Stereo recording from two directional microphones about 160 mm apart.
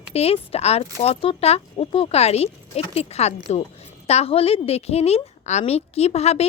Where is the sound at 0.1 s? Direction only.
40° left (ahead or behind).